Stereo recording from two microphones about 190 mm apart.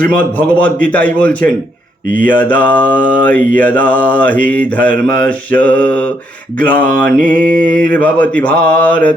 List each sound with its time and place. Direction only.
0.6 s mantra: 5° left (ahead or behind)
7.3 s mantra: 45° right (ahead or behind)
7.9 s mantra: 10° left (ahead or behind)